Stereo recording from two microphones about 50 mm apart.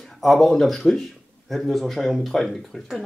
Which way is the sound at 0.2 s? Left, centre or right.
Centre.